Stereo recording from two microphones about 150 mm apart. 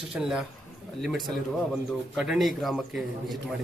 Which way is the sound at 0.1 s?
5° right (ahead or behind).